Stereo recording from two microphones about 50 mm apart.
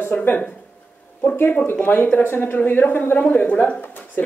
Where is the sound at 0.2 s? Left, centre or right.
Left.